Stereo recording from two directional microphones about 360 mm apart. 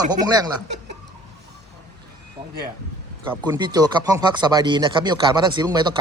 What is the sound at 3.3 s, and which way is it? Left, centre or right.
Speech, centre.